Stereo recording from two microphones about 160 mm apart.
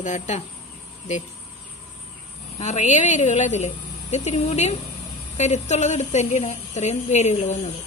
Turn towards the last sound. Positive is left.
turn(degrees=45)  # may be behind; listen again after turning